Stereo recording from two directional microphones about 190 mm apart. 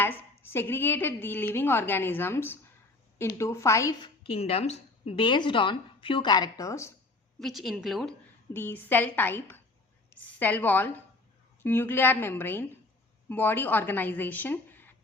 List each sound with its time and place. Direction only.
0.0 s a woman's voice: 10° left (ahead or behind)
4.3 s a woman's voice: 30° left (ahead or behind); by 6.9 s 15° left (ahead or behind)
7.3 s a woman's voice: centre (ahead or behind)
8.5 s a woman's voice: 10° left (ahead or behind)